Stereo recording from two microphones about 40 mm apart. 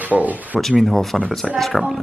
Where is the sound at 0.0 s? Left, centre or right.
Right.